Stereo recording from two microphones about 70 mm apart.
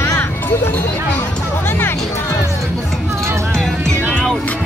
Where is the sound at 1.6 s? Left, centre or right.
Left.